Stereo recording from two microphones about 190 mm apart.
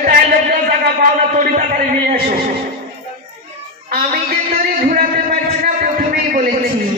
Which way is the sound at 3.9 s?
45° right (ahead or behind).